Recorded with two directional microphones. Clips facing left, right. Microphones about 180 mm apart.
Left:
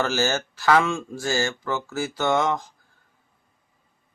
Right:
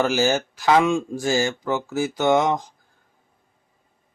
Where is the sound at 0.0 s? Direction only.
15° right (ahead or behind).